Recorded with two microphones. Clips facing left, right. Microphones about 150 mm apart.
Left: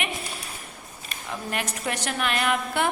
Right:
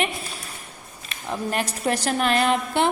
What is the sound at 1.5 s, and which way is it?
A woman's voice, 35° right (ahead or behind).